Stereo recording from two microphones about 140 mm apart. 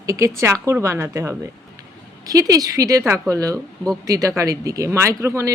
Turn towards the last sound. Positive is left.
turn(degrees=-20)  # may be behind; listen again after turning